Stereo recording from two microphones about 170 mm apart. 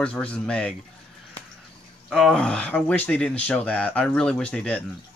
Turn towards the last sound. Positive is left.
turn(degrees=5)  # may be behind; listen again after turning